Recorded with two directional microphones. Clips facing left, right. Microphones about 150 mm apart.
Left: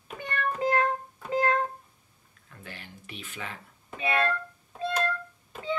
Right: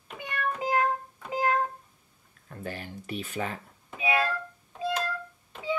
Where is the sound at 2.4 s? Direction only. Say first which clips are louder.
Right 8 dB; 40° right (ahead or behind).